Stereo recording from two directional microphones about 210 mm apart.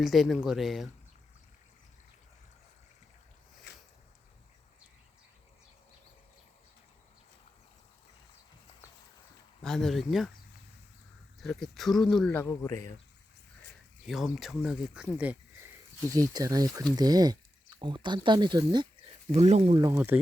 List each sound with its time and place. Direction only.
0.0 s speech: centre (ahead or behind)
3.7 s a sound: 55° left (ahead or behind)
9.6 s speech: 5° left (ahead or behind)
11.3 s speech: centre (ahead or behind)
14.1 s speech: centre (ahead or behind); by 18.9 s 20° right (ahead or behind)
19.3 s speech: 30° right (ahead or behind)
19.9 s speech: 10° right (ahead or behind)